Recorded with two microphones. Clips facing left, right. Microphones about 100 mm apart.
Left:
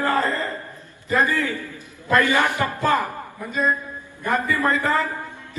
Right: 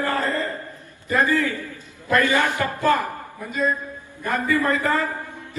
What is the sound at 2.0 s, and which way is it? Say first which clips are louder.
A man's voice: left 1 dB; 20° left (ahead or behind).